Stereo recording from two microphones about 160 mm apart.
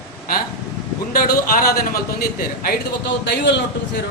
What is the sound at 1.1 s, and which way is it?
Speech, 65° left (ahead or behind).